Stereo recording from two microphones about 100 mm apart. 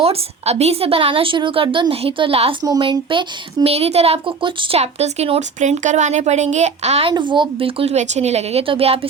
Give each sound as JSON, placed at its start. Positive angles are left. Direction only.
{"t": 0.0, "sound": "a woman's voice", "side_deg": -85}
{"t": 2.8, "sound": "speech", "side_deg": -55}
{"t": 7.1, "sound": "a woman's voice", "side_deg": -50}